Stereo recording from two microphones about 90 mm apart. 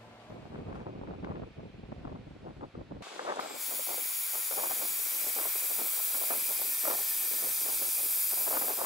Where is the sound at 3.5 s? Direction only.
Centre (ahead or behind).